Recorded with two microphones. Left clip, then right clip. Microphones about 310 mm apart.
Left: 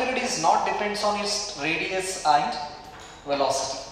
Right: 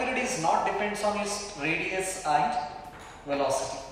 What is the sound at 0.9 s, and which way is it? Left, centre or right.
A man's voice, centre.